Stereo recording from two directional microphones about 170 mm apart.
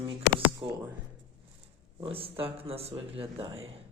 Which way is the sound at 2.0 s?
35° right (ahead or behind).